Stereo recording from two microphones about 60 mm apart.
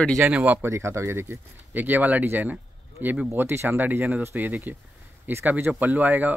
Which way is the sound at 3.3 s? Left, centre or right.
Right.